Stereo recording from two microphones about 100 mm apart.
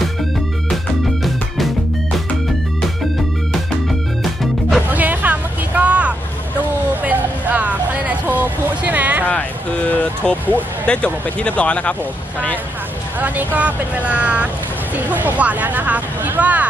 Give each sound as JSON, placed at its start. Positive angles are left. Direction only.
{"t": 4.2, "sound": "music", "side_deg": 0}
{"t": 4.8, "sound": "vehicle", "side_deg": -15}
{"t": 7.0, "sound": "a sound", "side_deg": -15}
{"t": 9.2, "sound": "speech", "side_deg": 15}
{"t": 13.2, "sound": "speech", "side_deg": -15}